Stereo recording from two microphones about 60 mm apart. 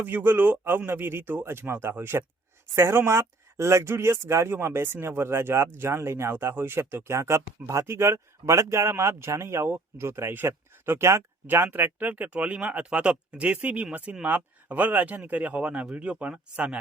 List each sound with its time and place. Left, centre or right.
0.0 s a man's voice: right
7.2 s speech: right
11.4 s speech: right